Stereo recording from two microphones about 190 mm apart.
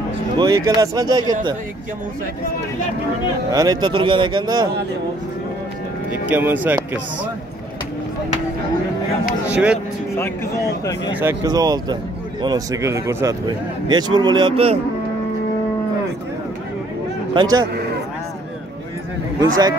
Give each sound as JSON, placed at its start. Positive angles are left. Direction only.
{"t": 0.4, "sound": "speech", "side_deg": -20}
{"t": 3.5, "sound": "speech", "side_deg": -20}
{"t": 6.2, "sound": "speech", "side_deg": -10}
{"t": 9.5, "sound": "speech", "side_deg": -5}
{"t": 10.1, "sound": "speech", "side_deg": 15}
{"t": 11.1, "sound": "speech", "side_deg": -15}
{"t": 17.3, "sound": "speech", "side_deg": -20}